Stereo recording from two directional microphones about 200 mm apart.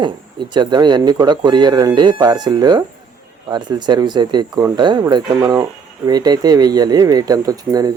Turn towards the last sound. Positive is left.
turn(degrees=-20)  # may be behind; listen again after turning